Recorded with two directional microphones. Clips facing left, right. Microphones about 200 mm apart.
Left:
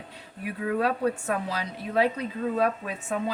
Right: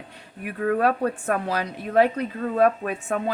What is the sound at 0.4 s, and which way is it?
A woman's voice, 50° right (ahead or behind).